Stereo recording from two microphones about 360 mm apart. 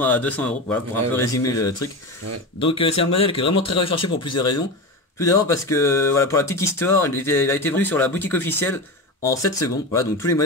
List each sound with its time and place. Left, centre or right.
0.0 s speech: centre
2.9 s speech: left
3.6 s speech: centre